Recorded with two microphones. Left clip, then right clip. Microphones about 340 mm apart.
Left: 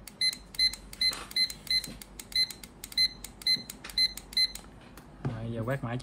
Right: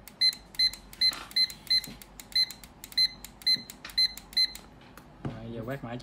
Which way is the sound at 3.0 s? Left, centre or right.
Centre.